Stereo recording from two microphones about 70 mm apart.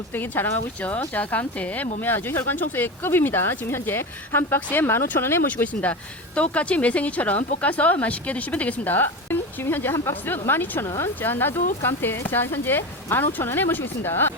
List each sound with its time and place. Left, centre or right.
0.1 s speech: left
5.5 s speech: left
10.8 s speech: left
11.2 s speech: left